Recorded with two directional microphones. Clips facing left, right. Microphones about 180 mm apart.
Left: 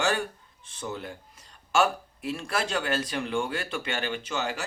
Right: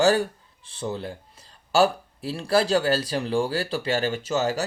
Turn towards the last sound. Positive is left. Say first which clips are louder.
# right 7 dB
turn(degrees=-40)  # may be behind; listen again after turning